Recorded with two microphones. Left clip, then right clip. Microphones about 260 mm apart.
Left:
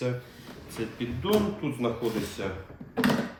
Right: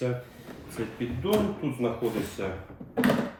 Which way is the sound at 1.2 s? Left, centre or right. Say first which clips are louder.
Even; centre.